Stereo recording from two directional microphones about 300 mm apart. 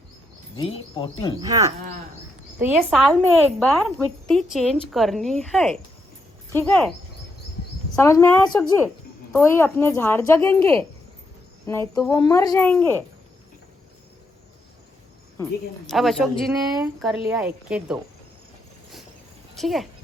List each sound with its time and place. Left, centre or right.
0.5 s a woman's voice: centre
1.4 s a woman's voice: centre
7.9 s a woman's voice: centre
15.4 s a woman's voice: centre
19.5 s speech: centre